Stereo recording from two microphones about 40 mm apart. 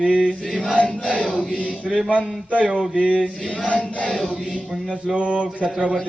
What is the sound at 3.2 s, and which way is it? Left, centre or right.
Speech, left.